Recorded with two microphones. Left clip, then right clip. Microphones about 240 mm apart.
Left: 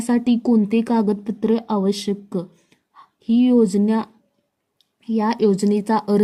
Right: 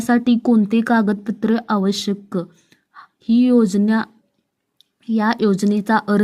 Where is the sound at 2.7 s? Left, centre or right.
Right.